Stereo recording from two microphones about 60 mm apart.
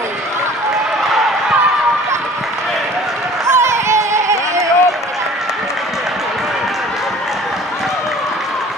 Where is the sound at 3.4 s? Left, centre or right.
Right.